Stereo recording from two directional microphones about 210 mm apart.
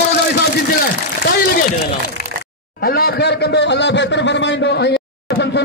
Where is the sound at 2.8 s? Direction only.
45° left (ahead or behind).